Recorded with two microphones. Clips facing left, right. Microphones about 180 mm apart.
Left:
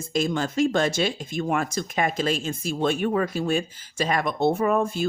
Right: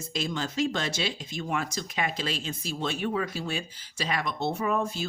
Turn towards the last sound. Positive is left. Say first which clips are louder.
# left 6 dB
turn(degrees=50)  # may be behind; listen again after turning